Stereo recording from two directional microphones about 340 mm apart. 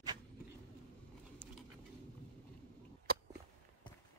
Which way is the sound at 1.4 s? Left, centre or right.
Centre.